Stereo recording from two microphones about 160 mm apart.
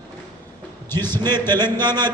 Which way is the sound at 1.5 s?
25° right (ahead or behind).